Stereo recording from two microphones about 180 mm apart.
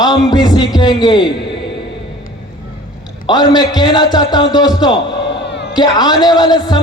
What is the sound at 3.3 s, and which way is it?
A man's voice, 25° left (ahead or behind).